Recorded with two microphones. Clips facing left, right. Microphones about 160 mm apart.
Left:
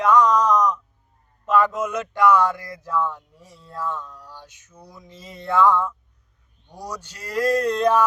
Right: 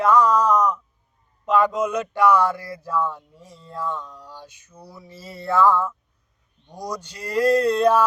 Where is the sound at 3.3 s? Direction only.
10° left (ahead or behind).